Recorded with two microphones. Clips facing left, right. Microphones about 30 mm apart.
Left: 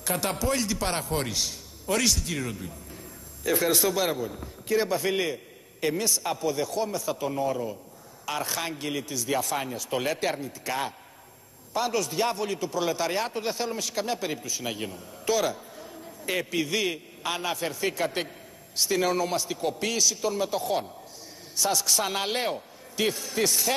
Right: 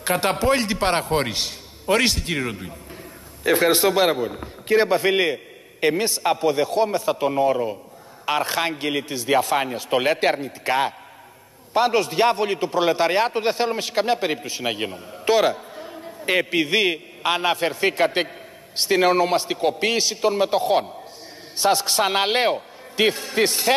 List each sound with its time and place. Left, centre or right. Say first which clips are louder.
0.0 s a man's voice: right 8 dB; right